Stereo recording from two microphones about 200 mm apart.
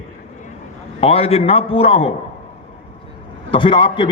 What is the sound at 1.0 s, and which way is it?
A man's voice, 30° left (ahead or behind).